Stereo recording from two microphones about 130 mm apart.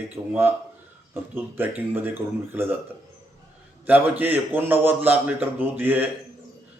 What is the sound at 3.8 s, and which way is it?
A man's voice, 15° right (ahead or behind).